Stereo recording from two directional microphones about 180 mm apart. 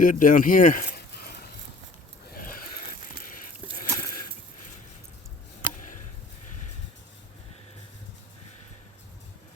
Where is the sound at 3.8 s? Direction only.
50° left (ahead or behind).